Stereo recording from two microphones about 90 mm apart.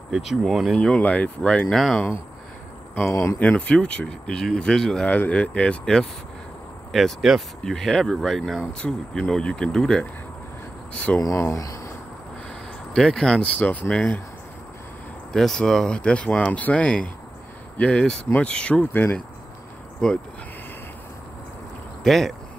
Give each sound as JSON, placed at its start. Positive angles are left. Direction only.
{"t": 0.1, "sound": "speech", "side_deg": -5}
{"t": 0.7, "sound": "speech", "side_deg": 10}
{"t": 3.1, "sound": "speech", "side_deg": 35}
{"t": 3.3, "sound": "speech", "side_deg": 15}
{"t": 5.1, "sound": "speech", "side_deg": 15}
{"t": 11.1, "sound": "speech", "side_deg": 40}
{"t": 12.9, "sound": "speech", "side_deg": 5}
{"t": 15.3, "sound": "speech", "side_deg": 5}
{"t": 20.0, "sound": "speech", "side_deg": 10}
{"t": 22.0, "sound": "speech", "side_deg": 0}